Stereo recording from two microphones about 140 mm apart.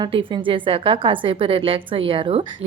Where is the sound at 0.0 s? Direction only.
35° right (ahead or behind).